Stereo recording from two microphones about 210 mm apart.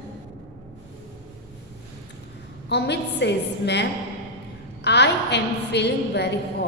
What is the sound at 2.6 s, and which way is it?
A woman's voice, 55° left (ahead or behind).